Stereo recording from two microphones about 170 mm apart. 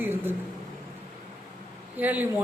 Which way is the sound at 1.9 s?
10° right (ahead or behind).